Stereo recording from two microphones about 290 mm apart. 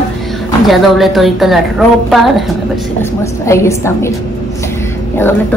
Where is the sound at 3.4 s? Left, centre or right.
Centre.